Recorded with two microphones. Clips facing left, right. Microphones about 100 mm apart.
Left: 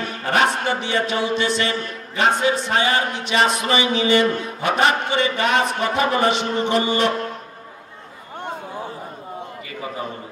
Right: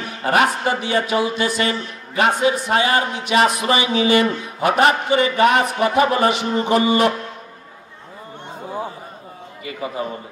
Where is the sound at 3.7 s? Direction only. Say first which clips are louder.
Even; 25° left (ahead or behind).